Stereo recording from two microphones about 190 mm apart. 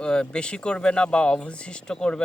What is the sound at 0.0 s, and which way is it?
Speech, 5° left (ahead or behind).